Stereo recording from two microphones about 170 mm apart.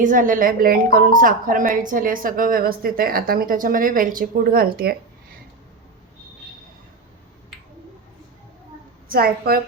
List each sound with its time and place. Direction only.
0.0 s a woman's voice: 50° right (ahead or behind)
9.0 s a woman's voice: 60° right (ahead or behind)